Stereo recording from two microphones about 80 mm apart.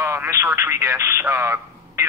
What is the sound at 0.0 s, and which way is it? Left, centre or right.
Speech, right.